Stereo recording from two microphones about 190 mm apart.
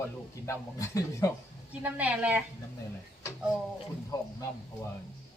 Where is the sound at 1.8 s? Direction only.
10° right (ahead or behind).